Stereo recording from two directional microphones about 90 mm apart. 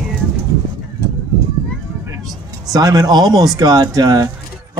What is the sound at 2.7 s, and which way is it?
Speech, 45° right (ahead or behind).